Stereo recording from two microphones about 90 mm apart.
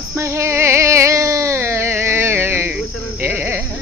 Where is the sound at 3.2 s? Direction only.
25° right (ahead or behind).